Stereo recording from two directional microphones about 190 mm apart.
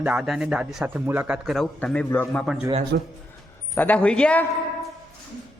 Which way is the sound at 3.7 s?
10° left (ahead or behind).